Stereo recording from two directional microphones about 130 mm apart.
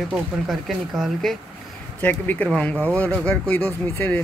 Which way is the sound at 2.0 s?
15° left (ahead or behind).